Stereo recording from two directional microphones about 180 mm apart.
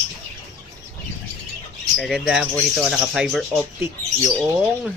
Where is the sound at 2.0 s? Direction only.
Centre (ahead or behind).